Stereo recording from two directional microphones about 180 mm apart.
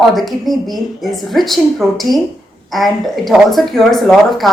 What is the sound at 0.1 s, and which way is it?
A woman's voice, centre (ahead or behind).